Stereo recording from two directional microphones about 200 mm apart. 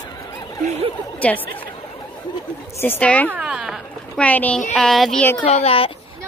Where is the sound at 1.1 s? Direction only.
5° left (ahead or behind).